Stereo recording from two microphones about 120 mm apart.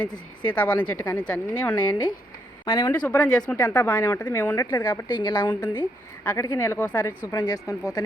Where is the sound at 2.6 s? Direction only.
45° left (ahead or behind).